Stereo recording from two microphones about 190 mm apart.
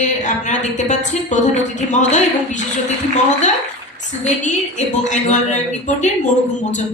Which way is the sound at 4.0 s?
40° left (ahead or behind).